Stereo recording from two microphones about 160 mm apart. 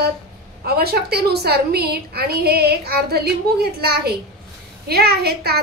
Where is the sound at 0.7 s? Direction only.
80° right.